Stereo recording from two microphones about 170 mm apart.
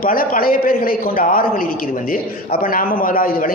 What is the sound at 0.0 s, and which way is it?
A man's voice, 55° left (ahead or behind).